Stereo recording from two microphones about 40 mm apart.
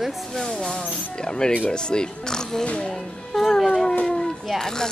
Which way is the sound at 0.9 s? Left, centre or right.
Left.